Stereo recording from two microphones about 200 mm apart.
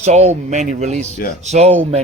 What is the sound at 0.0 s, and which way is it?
Speech, 35° right (ahead or behind).